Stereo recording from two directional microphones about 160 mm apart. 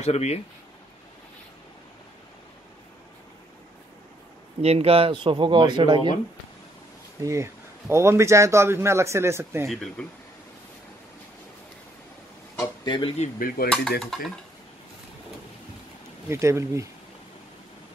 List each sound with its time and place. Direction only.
0.0 s speech: 45° left (ahead or behind)
4.6 s speech: 40° right (ahead or behind)
7.2 s a man's voice: 20° right (ahead or behind)
10.0 s speech: 10° left (ahead or behind)
12.5 s speech: 25° left (ahead or behind)
13.7 s speech: centre (ahead or behind)
16.3 s a man's voice: 15° right (ahead or behind)